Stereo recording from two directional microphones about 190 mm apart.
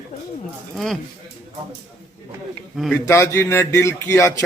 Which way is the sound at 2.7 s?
Centre (ahead or behind).